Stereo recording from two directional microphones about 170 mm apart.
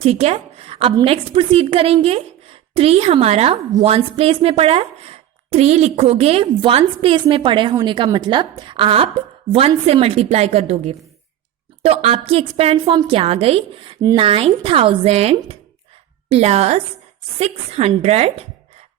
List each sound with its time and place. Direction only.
0.0 s a woman's voice: 35° right (ahead or behind)